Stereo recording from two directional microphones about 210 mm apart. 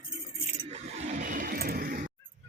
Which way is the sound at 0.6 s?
30° right (ahead or behind).